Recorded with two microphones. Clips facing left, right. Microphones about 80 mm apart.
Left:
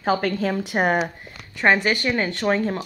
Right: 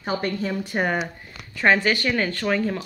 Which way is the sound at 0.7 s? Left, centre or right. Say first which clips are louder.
Left 3 dB; left.